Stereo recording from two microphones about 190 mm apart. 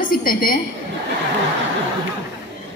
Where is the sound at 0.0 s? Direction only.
50° left (ahead or behind).